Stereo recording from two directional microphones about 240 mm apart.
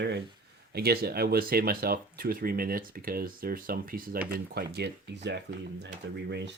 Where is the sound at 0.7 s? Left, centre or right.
Right.